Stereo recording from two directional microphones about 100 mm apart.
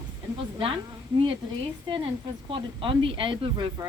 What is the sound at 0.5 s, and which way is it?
Speech, 55° right (ahead or behind).